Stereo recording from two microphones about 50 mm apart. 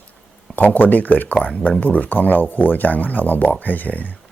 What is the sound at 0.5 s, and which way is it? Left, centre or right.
Speech, left.